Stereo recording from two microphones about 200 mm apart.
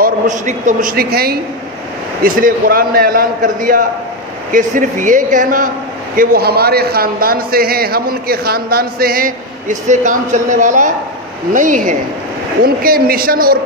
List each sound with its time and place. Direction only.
0.0 s a man's voice: 40° right (ahead or behind)